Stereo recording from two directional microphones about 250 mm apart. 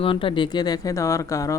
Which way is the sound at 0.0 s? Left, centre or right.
Left.